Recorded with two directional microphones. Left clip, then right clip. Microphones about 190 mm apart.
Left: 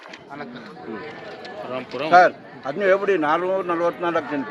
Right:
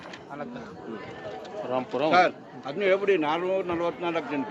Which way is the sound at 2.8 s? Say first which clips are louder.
Left 4 dB; 10° left (ahead or behind).